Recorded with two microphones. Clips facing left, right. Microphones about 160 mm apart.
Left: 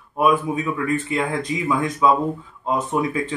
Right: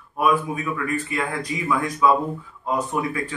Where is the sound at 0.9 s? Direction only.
25° left (ahead or behind).